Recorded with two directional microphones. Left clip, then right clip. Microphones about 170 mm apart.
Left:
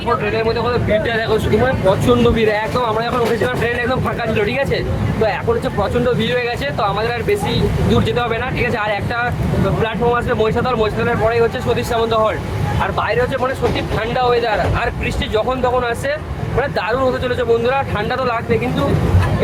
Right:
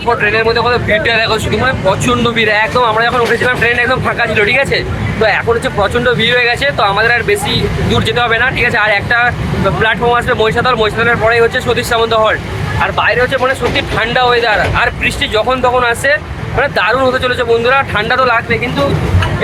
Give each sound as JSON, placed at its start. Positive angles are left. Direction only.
{"t": 0.3, "sound": "speech", "side_deg": 15}
{"t": 6.1, "sound": "speech", "side_deg": 10}
{"t": 13.3, "sound": "speech", "side_deg": 5}